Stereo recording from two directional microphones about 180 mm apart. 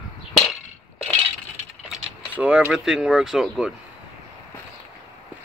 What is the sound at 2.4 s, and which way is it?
Speech, 5° right (ahead or behind).